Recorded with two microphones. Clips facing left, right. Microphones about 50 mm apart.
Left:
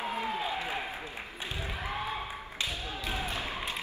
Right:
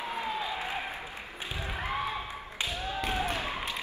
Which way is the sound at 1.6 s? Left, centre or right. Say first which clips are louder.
Right 4 dB; right.